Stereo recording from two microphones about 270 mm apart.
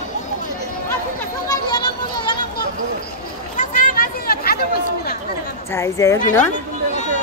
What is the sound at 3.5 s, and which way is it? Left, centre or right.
Chatter, left.